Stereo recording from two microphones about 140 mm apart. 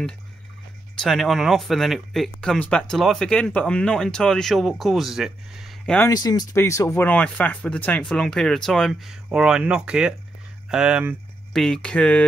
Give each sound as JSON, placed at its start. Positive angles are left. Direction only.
{"t": 1.0, "sound": "speech", "side_deg": 0}
{"t": 6.1, "sound": "speech", "side_deg": 30}
{"t": 11.5, "sound": "speech", "side_deg": 5}